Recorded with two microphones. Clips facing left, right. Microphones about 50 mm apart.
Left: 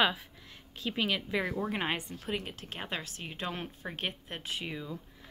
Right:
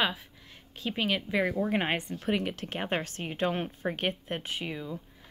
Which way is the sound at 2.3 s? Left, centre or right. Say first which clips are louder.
Right 7 dB; right.